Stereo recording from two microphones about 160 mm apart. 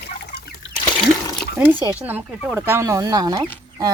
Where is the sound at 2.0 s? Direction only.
10° right (ahead or behind).